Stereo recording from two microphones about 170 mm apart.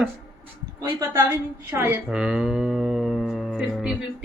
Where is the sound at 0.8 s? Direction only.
15° right (ahead or behind).